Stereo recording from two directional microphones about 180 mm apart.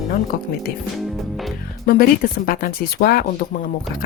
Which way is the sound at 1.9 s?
55° left (ahead or behind).